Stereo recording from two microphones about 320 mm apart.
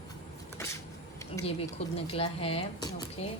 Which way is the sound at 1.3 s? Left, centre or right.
Centre.